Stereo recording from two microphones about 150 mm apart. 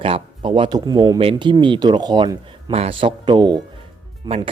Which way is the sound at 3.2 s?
30° right (ahead or behind).